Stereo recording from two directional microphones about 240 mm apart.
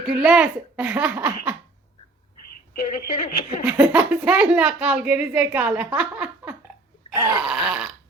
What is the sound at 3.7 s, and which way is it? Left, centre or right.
A woman's voice, centre.